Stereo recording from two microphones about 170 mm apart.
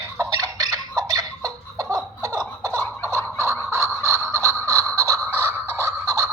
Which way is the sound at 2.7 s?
10° left (ahead or behind).